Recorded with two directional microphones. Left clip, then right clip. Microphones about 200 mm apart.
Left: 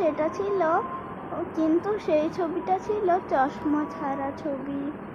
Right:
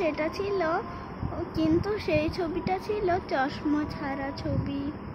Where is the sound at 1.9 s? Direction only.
20° right (ahead or behind).